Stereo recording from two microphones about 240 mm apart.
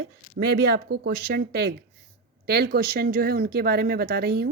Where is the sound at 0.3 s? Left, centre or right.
Right.